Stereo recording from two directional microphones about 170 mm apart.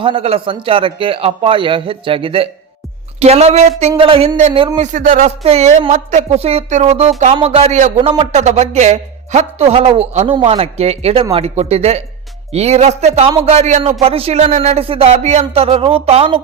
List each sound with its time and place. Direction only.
0.0 s a man's voice: 30° right (ahead or behind)
4.9 s a man's voice: 50° right (ahead or behind)